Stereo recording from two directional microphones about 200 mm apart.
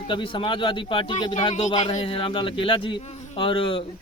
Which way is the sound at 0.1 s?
25° left (ahead or behind).